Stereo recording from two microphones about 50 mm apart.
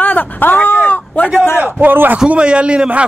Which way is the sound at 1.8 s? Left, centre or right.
Right.